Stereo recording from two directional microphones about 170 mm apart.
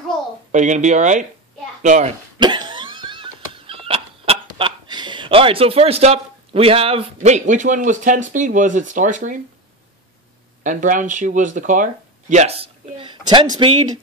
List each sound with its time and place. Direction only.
0.5 s speech: 45° right (ahead or behind)
2.3 s cough: 25° right (ahead or behind); by 9.4 s 50° right (ahead or behind)
10.6 s speech: 50° right (ahead or behind); by 13.7 s 30° right (ahead or behind)